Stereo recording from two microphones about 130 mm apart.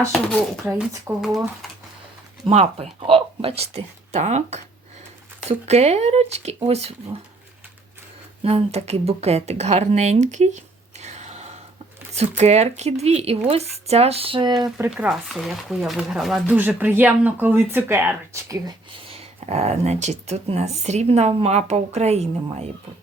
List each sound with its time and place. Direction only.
0.1 s speech: 5° left (ahead or behind)
2.5 s speech: 50° right (ahead or behind)
8.4 s speech: 50° right (ahead or behind)
11.0 s a sound: 60° right (ahead or behind)
12.3 s speech: 60° right (ahead or behind); by 14.7 s 35° right (ahead or behind)
14.8 s speech: 5° right (ahead or behind)
16.6 s speech: 15° right (ahead or behind)
19.0 s speech: 50° right (ahead or behind)